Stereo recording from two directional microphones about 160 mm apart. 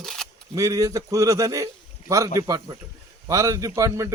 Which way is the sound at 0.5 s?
20° right (ahead or behind).